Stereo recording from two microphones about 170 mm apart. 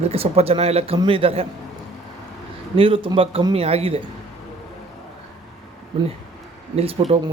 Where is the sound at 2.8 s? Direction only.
30° right (ahead or behind).